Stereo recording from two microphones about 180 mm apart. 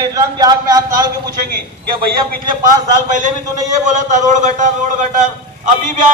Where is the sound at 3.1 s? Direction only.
45° right (ahead or behind).